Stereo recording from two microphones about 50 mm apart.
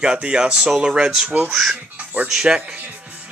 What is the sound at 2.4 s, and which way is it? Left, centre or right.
Speech, right.